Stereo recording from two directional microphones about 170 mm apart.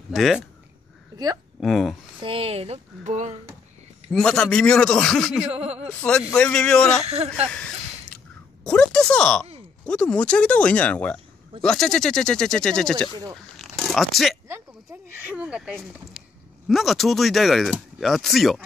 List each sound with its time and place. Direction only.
0.1 s speech: centre (ahead or behind)
1.1 s speech: 20° right (ahead or behind)
1.6 s speech: centre (ahead or behind)
2.2 s speech: 35° right (ahead or behind)
4.1 s speech: 5° left (ahead or behind)
5.5 s speech: 40° right (ahead or behind)
5.9 s speech: 5° left (ahead or behind)
7.5 s a sound: 5° left (ahead or behind)
8.6 s speech: 5° left (ahead or behind)
13.6 s zipper: centre (ahead or behind)
14.5 s speech: 15° right (ahead or behind)